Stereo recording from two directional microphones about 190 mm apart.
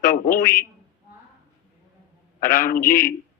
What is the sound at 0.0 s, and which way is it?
Speech, 45° left (ahead or behind).